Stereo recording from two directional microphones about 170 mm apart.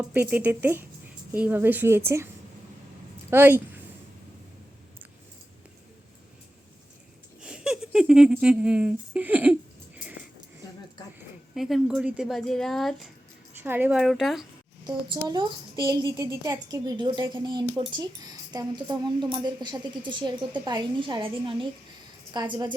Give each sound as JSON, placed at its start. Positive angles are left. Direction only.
{"t": 0.0, "sound": "a woman's voice", "side_deg": -10}
{"t": 3.2, "sound": "a woman's voice", "side_deg": -15}
{"t": 7.4, "sound": "speech", "side_deg": -5}
{"t": 11.5, "sound": "speech", "side_deg": 0}
{"t": 13.6, "sound": "a woman's voice", "side_deg": -10}
{"t": 14.0, "sound": "speech", "side_deg": 0}
{"t": 14.8, "sound": "a child's voice", "side_deg": -25}